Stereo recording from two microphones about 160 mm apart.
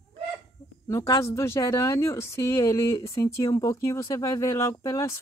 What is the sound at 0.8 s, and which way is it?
Speech, 20° left (ahead or behind).